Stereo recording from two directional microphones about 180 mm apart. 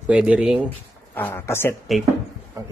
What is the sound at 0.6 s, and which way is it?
Speech, 10° left (ahead or behind).